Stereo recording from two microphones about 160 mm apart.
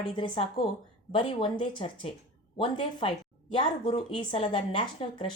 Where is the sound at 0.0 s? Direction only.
30° left (ahead or behind).